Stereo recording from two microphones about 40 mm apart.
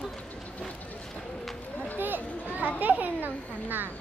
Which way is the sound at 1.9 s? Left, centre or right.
Right.